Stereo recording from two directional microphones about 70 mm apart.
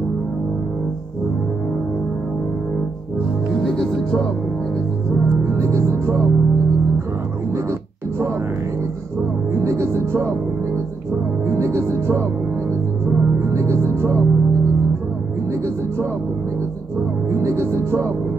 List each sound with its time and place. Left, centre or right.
3.6 s music: centre
5.4 s music: right
9.5 s music: right
11.4 s music: right
17.3 s music: right